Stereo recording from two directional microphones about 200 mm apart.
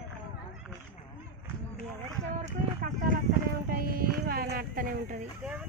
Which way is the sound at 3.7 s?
50° right (ahead or behind).